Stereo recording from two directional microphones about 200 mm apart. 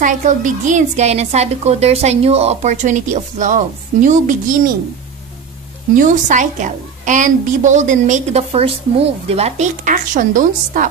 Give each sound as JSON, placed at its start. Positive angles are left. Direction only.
{"t": 0.0, "sound": "a woman's voice", "side_deg": -40}
{"t": 5.9, "sound": "a woman's voice", "side_deg": -40}